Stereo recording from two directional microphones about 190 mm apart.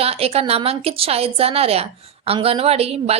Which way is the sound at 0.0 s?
30° right (ahead or behind).